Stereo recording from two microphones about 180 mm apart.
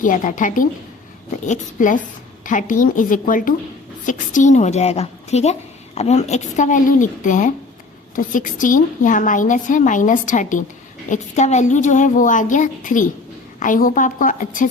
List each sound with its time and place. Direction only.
0.0 s a woman's voice: 45° left (ahead or behind)